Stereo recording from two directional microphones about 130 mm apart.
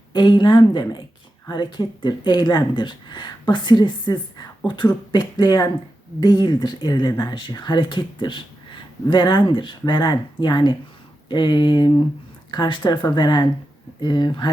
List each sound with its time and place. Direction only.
0.1 s speech: 35° left (ahead or behind)